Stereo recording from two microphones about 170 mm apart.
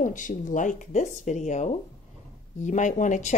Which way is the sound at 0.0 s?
50° left (ahead or behind).